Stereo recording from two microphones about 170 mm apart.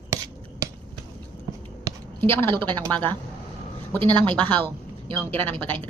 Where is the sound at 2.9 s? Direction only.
10° left (ahead or behind).